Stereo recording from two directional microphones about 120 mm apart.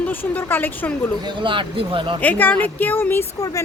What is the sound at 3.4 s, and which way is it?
Speech, 30° left (ahead or behind).